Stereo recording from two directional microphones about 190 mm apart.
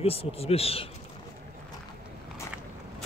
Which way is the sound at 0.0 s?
30° left (ahead or behind).